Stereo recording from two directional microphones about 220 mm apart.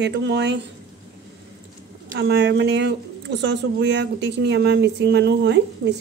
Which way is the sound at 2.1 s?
50° right (ahead or behind).